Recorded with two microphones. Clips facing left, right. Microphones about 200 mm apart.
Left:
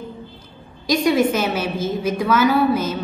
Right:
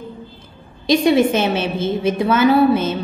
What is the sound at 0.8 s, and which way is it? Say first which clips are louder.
A woman's voice: right 3 dB; 30° right (ahead or behind).